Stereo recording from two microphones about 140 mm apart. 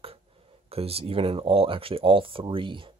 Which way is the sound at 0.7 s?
45° right (ahead or behind).